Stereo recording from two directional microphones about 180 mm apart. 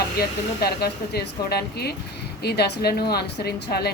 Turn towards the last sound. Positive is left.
turn(degrees=60)  # may be behind; listen again after turning